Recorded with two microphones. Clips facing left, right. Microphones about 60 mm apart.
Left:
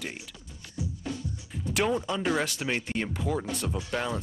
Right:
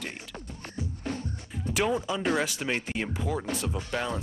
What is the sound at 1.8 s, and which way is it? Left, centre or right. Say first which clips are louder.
Speech: even; centre.